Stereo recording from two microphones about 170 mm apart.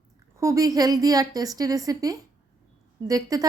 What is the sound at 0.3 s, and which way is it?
A woman's voice, 20° right (ahead or behind).